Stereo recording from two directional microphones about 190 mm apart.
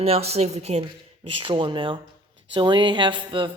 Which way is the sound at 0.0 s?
30° right (ahead or behind).